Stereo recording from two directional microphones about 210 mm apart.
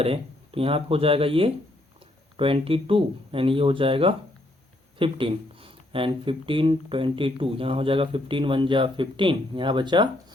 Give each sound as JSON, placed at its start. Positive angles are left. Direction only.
{"t": 0.0, "sound": "speech", "side_deg": -25}